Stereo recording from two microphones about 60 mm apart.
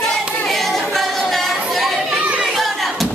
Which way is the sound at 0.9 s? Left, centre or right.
Centre.